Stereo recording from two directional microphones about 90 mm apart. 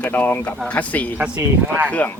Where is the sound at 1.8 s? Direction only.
15° left (ahead or behind).